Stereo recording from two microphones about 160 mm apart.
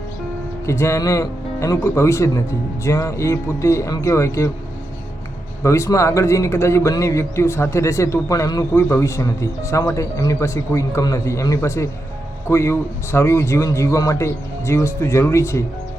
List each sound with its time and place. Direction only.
0.6 s speech: 20° left (ahead or behind)
5.6 s a man's voice: 20° left (ahead or behind)